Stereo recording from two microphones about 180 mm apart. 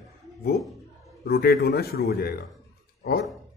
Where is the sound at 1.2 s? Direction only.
60° left (ahead or behind).